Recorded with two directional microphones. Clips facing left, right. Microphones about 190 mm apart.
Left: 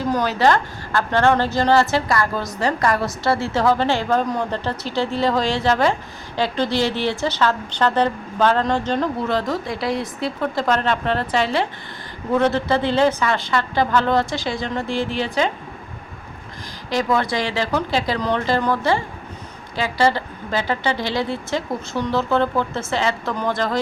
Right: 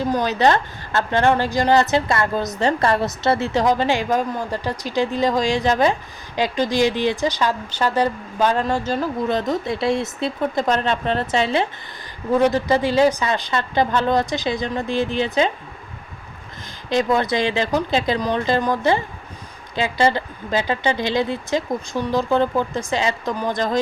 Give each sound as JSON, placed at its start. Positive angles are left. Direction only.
{"t": 0.1, "sound": "a woman's voice", "side_deg": -20}
{"t": 9.3, "sound": "speech", "side_deg": -20}
{"t": 16.9, "sound": "a woman's voice", "side_deg": -20}